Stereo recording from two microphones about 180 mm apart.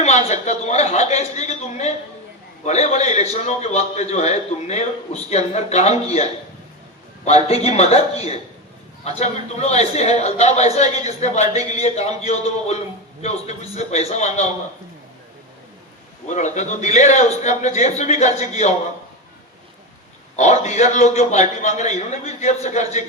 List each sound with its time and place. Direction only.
0.0 s a sound: 40° left (ahead or behind)
2.6 s a man's voice: 40° left (ahead or behind)
7.3 s a man's voice: 35° left (ahead or behind)
16.2 s a man's voice: 40° left (ahead or behind)
20.3 s a man's voice: 40° left (ahead or behind)